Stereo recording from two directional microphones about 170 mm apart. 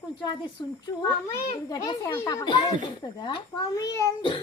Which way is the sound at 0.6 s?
25° left (ahead or behind).